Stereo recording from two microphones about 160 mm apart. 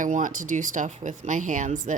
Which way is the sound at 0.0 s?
55° right (ahead or behind).